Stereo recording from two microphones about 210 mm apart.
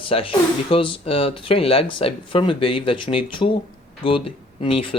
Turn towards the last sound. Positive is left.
turn(degrees=25)  # may be behind; listen again after turning